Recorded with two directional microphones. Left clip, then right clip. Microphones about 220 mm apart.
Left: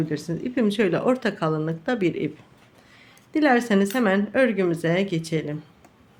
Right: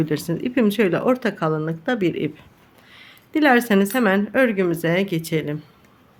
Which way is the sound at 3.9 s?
10° right (ahead or behind).